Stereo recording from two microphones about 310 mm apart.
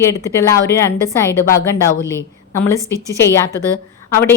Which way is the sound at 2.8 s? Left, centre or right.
Centre.